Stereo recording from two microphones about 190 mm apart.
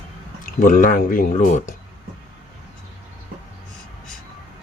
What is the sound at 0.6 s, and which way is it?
Speech, 45° left (ahead or behind).